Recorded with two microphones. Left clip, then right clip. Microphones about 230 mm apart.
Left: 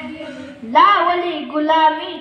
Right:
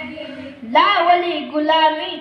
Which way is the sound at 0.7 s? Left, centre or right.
Right.